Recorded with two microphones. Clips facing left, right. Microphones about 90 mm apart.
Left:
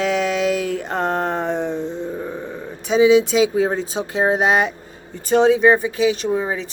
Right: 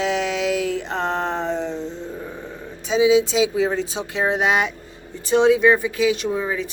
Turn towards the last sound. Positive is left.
turn(degrees=30)  # may be behind; listen again after turning